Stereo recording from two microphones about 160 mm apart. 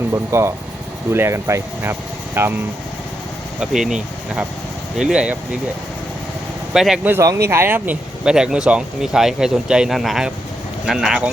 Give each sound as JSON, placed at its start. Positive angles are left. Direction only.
{"t": 0.1, "sound": "speech", "side_deg": -15}
{"t": 3.6, "sound": "speech", "side_deg": -5}
{"t": 4.9, "sound": "speech", "side_deg": -5}
{"t": 6.7, "sound": "speech", "side_deg": 0}